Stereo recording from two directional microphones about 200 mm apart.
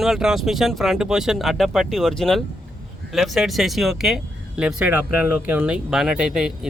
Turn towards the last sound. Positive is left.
turn(degrees=-5)  # may be behind; listen again after turning